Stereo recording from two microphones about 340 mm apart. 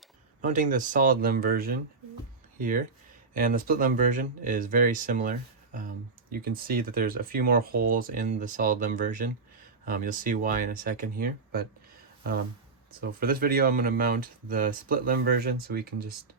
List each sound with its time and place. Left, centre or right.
0.4 s speech: right
13.0 s speech: right